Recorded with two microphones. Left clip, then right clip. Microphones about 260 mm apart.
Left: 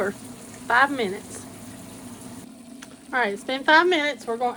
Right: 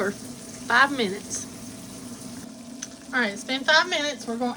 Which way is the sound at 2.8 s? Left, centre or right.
Left.